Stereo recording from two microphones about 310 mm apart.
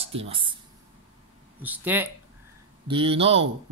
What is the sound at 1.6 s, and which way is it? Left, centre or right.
Speech, centre.